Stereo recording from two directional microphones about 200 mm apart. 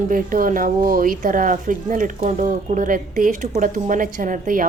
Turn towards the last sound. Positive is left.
turn(degrees=-45)  # may be behind; listen again after turning